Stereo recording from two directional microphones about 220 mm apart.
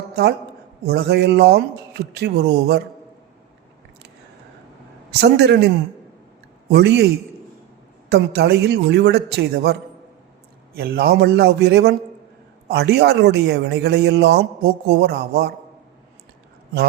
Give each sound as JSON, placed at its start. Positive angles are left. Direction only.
{"t": 0.9, "sound": "a man's voice", "side_deg": -45}
{"t": 5.2, "sound": "a man's voice", "side_deg": -50}
{"t": 8.1, "sound": "a man's voice", "side_deg": -50}
{"t": 10.8, "sound": "a man's voice", "side_deg": -45}